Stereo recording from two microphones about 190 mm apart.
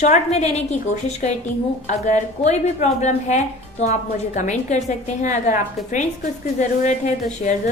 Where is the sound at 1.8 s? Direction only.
40° left (ahead or behind).